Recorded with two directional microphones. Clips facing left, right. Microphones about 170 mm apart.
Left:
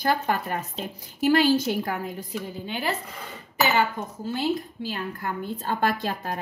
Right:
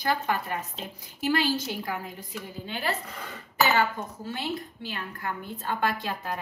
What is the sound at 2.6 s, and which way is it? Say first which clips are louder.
Speech: left 1 dB; 15° left (ahead or behind).